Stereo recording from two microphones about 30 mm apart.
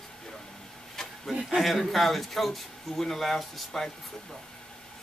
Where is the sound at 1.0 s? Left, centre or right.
Centre.